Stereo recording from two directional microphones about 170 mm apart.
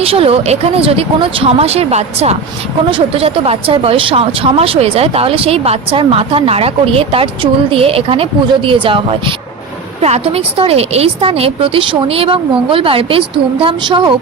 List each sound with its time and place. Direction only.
0.0 s speech: 35° right (ahead or behind)